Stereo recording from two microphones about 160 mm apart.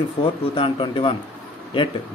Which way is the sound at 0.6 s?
30° left (ahead or behind).